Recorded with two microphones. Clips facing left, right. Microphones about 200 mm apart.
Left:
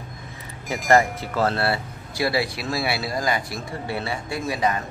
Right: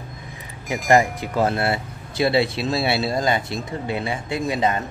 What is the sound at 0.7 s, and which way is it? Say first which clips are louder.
Speech: right 1 dB; 15° right (ahead or behind).